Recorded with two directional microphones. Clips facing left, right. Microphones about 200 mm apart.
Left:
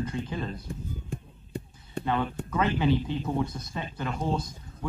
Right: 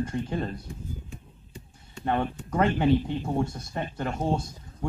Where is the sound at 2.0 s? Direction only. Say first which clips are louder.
Right 1 dB; 50° right (ahead or behind).